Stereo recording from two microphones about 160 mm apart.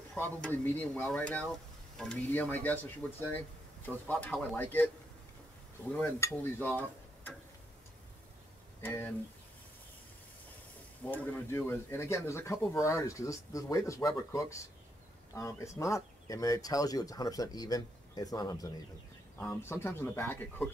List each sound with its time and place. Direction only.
0.2 s speech: 10° left (ahead or behind)
8.8 s speech: 10° left (ahead or behind)
11.1 s speech: 15° left (ahead or behind)